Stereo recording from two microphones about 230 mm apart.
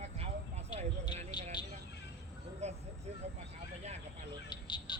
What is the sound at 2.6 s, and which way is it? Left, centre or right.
Speech, right.